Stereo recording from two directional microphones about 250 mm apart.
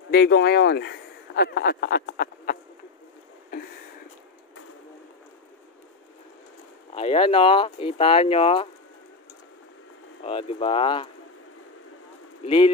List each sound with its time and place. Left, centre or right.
0.1 s speech: left
6.9 s speech: left
10.2 s speech: left
12.4 s speech: centre